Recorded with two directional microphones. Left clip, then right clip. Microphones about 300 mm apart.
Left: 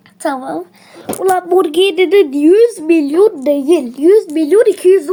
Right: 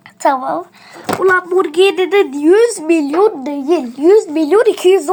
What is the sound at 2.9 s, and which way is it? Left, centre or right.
Speech, centre.